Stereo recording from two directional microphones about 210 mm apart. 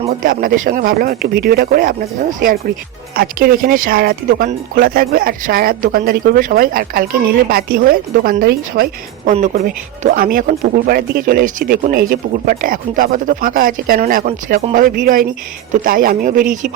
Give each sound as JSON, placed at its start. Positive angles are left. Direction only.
{"t": 0.1, "sound": "speech", "side_deg": -40}